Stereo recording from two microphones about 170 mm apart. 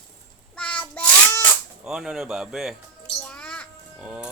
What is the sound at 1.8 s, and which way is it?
Speech, 5° right (ahead or behind).